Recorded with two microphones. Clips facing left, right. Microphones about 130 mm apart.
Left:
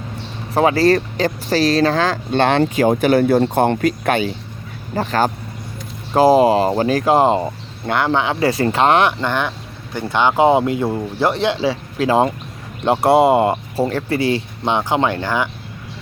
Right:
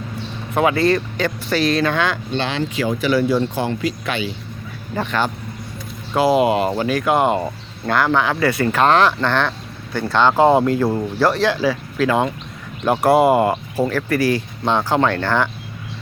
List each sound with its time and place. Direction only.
0.5 s speech: 35° left (ahead or behind)
2.3 s speech: 55° left (ahead or behind)
4.9 s speech: 40° left (ahead or behind); by 15.4 s 15° left (ahead or behind)